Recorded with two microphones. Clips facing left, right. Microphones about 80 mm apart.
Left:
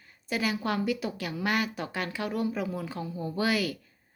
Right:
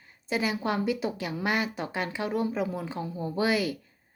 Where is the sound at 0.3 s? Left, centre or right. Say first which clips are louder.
Right 1 dB; right.